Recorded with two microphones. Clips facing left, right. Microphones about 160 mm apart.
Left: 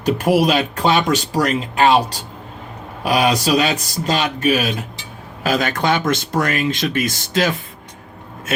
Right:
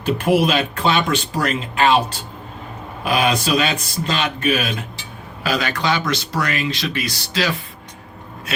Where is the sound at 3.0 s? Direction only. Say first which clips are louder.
Left 2 dB; 40° left (ahead or behind).